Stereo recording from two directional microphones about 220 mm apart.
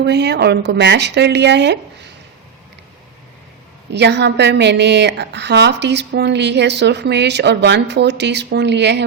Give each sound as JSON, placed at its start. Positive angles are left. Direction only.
{"t": 0.0, "sound": "a woman's voice", "side_deg": -50}
{"t": 3.9, "sound": "a woman's voice", "side_deg": -50}